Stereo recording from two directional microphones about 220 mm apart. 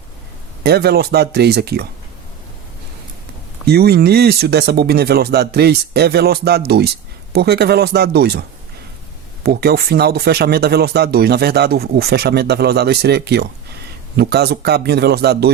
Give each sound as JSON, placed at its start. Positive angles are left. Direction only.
{"t": 0.6, "sound": "speech", "side_deg": -45}
{"t": 3.7, "sound": "speech", "side_deg": -45}